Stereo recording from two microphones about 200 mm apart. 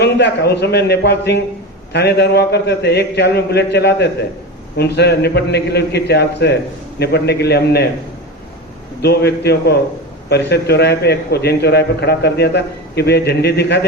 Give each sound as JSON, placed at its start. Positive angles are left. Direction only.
{"t": 0.0, "sound": "a man's voice", "side_deg": 55}
{"t": 9.0, "sound": "a man's voice", "side_deg": 55}